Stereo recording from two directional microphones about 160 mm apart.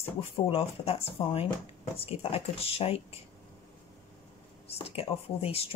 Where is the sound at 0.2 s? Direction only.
35° left (ahead or behind).